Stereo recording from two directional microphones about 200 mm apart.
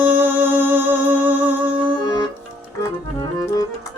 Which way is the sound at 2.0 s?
20° left (ahead or behind).